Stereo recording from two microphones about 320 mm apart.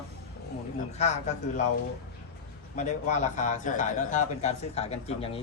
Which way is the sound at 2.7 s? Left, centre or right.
Left.